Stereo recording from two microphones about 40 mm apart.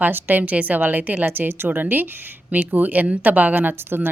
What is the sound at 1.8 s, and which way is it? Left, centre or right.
A woman's voice, right.